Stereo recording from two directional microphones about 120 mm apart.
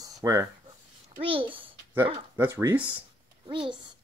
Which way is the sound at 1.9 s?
20° right (ahead or behind).